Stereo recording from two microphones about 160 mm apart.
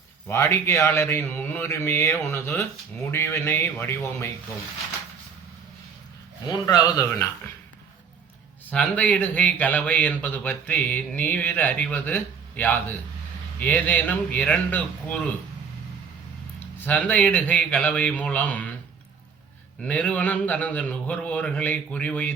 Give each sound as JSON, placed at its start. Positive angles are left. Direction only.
{"t": 0.3, "sound": "speech", "side_deg": 15}
{"t": 6.5, "sound": "speech", "side_deg": 20}
{"t": 8.7, "sound": "speech", "side_deg": 5}
{"t": 16.8, "sound": "speech", "side_deg": 10}
{"t": 19.8, "sound": "speech", "side_deg": 10}